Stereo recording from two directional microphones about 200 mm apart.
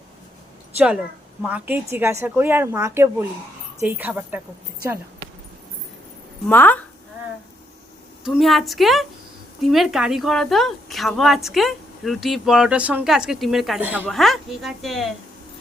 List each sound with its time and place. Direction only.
0.8 s a woman's voice: 5° right (ahead or behind)
6.5 s speech: 10° left (ahead or behind)
8.2 s speech: centre (ahead or behind)